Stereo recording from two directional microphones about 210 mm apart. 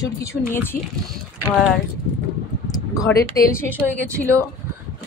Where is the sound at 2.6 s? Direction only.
15° left (ahead or behind).